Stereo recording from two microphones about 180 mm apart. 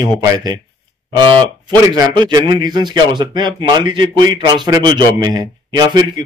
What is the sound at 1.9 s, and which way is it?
A man's voice, 25° right (ahead or behind).